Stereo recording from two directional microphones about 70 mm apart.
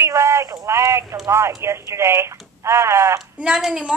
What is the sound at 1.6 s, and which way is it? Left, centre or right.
Speech, right.